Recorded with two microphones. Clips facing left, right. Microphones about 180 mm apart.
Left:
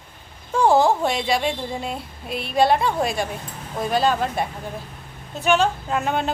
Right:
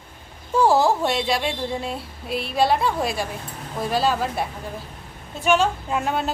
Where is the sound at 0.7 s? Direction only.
Centre (ahead or behind).